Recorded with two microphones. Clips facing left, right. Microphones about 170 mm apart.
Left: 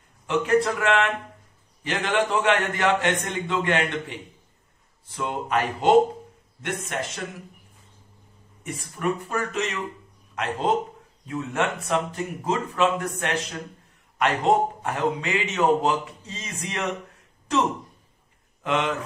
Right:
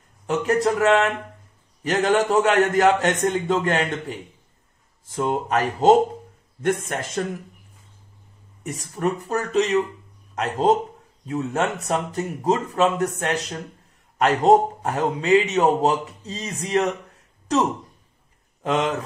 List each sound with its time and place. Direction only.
0.3 s a man's voice: 40° right (ahead or behind)
8.6 s a man's voice: 40° right (ahead or behind)
18.6 s a man's voice: 40° right (ahead or behind)